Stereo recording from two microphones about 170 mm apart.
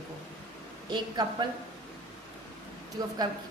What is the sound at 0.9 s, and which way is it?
Speech, 25° right (ahead or behind).